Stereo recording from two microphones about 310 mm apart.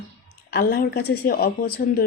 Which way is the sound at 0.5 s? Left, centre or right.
Left.